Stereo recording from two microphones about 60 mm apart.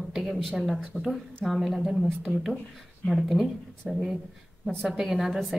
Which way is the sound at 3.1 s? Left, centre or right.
Centre.